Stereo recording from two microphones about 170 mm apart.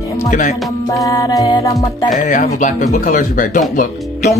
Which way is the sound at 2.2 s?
50° left (ahead or behind).